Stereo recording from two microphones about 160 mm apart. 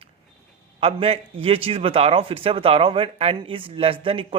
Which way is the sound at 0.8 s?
35° right (ahead or behind).